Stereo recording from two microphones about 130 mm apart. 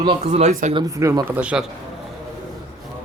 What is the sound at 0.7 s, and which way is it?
Speech, 25° right (ahead or behind).